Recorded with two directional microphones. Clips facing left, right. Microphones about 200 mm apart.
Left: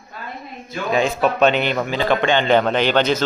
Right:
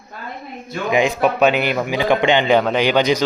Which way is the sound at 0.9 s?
15° right (ahead or behind).